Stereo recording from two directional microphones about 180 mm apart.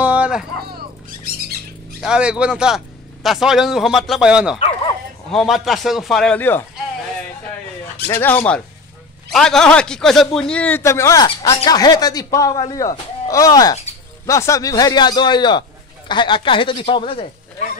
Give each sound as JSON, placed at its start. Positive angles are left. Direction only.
{"t": 0.0, "sound": "music", "side_deg": -5}
{"t": 0.7, "sound": "a sound", "side_deg": -55}
{"t": 2.0, "sound": "a man's voice", "side_deg": -5}
{"t": 8.1, "sound": "a man's voice", "side_deg": 10}